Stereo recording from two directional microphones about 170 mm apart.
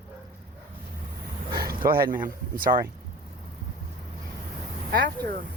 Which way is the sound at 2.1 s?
55° right (ahead or behind).